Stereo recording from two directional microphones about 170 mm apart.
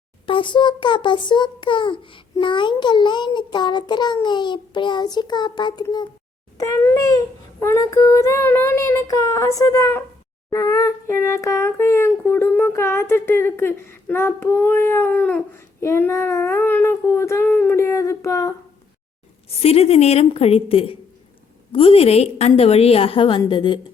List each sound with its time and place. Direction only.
0.3 s a child's voice: 30° left (ahead or behind)
7.6 s a sound: 15° left (ahead or behind)
19.5 s a woman's voice: 35° left (ahead or behind)